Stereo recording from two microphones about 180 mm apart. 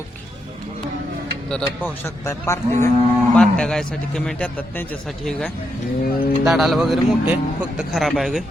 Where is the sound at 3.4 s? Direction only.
5° left (ahead or behind).